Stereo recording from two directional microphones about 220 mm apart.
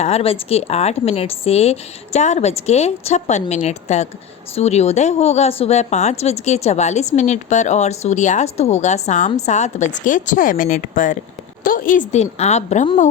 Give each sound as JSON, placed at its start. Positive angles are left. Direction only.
{"t": 0.0, "sound": "a woman's voice", "side_deg": 25}